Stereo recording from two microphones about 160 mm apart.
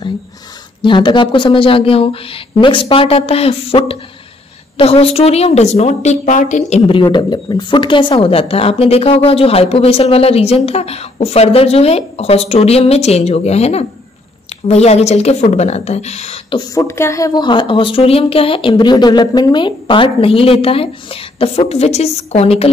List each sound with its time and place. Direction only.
0.8 s speech: 30° left (ahead or behind); by 6.8 s 50° left (ahead or behind)
6.9 s a woman's voice: 30° left (ahead or behind)
16.7 s speech: 15° left (ahead or behind); by 22.7 s 40° left (ahead or behind)